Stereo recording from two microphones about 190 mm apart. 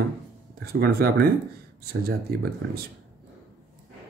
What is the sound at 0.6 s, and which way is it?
Speech, 55° right (ahead or behind).